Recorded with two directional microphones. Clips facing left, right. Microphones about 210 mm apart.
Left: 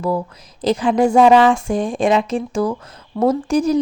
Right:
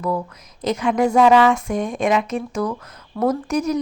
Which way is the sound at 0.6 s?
30° left (ahead or behind).